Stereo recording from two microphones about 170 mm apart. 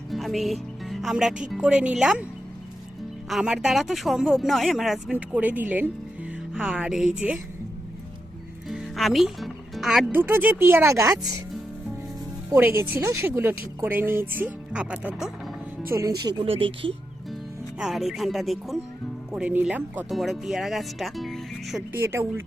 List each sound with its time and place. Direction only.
0.1 s speech: centre (ahead or behind)
3.2 s speech: centre (ahead or behind)
8.7 s speech: centre (ahead or behind); by 11.3 s 20° right (ahead or behind)
12.5 s speech: 15° right (ahead or behind)
15.9 s speech: 20° right (ahead or behind)
16.3 s speech: 30° right (ahead or behind)
17.7 s speech: centre (ahead or behind)
21.9 s speech: 15° right (ahead or behind)